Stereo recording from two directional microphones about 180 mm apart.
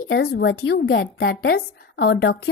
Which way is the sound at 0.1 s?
60° left (ahead or behind).